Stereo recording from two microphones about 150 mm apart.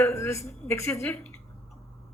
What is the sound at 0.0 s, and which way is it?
Speech, 15° left (ahead or behind).